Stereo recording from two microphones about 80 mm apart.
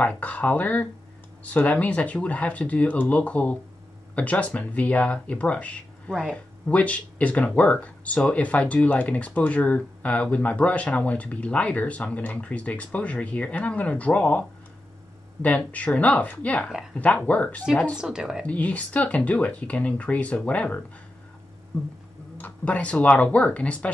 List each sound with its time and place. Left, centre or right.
0.0 s speech: centre
15.4 s a woman's voice: centre
17.9 s speech: centre
18.4 s speech: centre
22.4 s speech: centre